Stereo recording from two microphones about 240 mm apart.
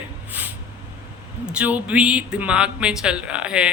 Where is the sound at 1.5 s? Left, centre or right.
Centre.